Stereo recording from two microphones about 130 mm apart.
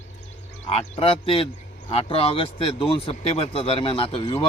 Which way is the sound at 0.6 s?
45° left (ahead or behind).